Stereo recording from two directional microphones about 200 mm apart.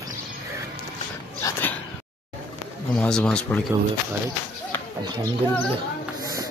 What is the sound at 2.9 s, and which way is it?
Speech, 5° left (ahead or behind).